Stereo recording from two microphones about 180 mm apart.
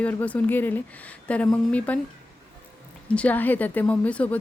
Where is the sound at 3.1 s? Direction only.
10° left (ahead or behind).